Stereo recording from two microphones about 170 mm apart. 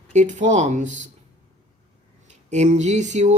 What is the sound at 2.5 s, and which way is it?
Speech, 40° right (ahead or behind).